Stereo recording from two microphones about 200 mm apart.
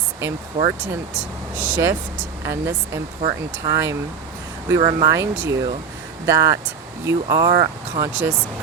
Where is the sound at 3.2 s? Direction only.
15° right (ahead or behind).